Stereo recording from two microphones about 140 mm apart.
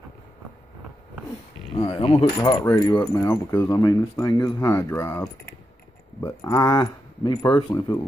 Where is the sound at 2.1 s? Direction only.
20° left (ahead or behind).